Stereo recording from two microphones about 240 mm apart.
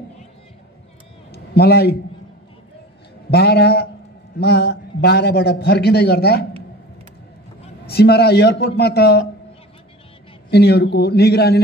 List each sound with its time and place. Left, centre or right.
1.3 s a sound: left
3.3 s a man's voice: left
7.8 s a man's voice: left
10.5 s a man's voice: left